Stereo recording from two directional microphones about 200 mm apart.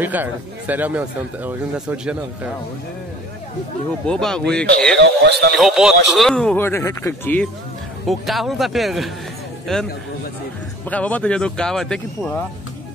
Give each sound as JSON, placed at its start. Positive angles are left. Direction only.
{"t": 0.0, "sound": "speech", "side_deg": -10}
{"t": 4.0, "sound": "speech", "side_deg": 5}
{"t": 4.9, "sound": "speech", "side_deg": -60}
{"t": 5.6, "sound": "speech", "side_deg": 0}
{"t": 8.1, "sound": "speech", "side_deg": 0}
{"t": 10.9, "sound": "speech", "side_deg": 5}